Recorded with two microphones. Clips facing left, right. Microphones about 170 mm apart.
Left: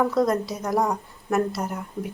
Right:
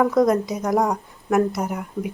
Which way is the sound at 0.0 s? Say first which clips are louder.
Right 4 dB; 15° right (ahead or behind).